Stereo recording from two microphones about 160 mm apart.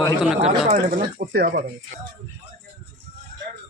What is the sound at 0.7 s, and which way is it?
Speech, 65° right (ahead or behind).